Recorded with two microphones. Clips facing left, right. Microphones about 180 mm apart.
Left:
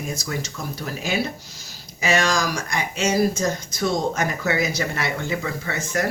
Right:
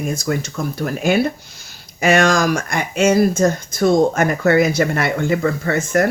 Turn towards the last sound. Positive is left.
turn(degrees=-50)  # may be behind; listen again after turning